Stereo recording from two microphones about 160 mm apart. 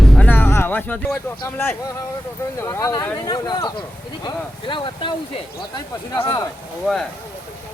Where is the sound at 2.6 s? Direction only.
20° left (ahead or behind).